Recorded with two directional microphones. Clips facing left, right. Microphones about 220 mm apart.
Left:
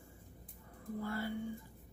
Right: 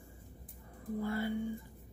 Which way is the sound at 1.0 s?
20° right (ahead or behind).